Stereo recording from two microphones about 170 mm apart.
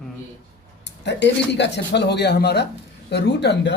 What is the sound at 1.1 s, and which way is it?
Speech, 90° left.